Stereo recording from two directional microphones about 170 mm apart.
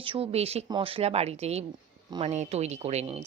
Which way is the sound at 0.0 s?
35° right (ahead or behind).